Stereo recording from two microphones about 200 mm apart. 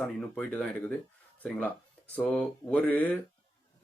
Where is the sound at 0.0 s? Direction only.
5° left (ahead or behind).